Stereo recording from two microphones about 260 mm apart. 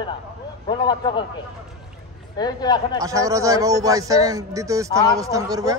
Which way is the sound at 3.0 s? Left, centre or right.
Centre.